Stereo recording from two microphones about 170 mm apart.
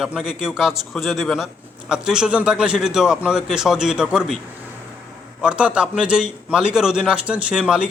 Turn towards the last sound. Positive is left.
turn(degrees=-5)  # may be behind; listen again after turning